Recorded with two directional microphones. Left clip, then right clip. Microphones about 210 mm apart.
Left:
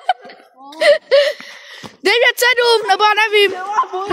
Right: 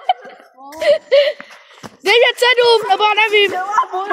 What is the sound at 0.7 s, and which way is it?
Speech, 45° left (ahead or behind).